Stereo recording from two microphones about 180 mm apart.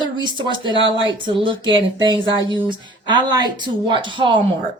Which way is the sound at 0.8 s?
90° right.